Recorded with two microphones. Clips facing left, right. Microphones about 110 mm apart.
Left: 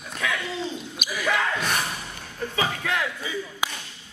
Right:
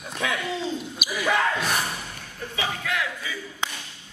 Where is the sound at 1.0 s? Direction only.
5° right (ahead or behind).